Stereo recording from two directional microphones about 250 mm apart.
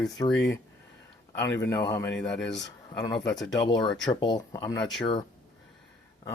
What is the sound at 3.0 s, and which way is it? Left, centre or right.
Speech, centre.